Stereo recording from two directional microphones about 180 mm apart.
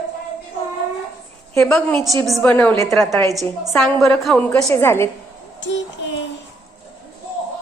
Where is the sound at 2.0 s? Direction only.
20° right (ahead or behind).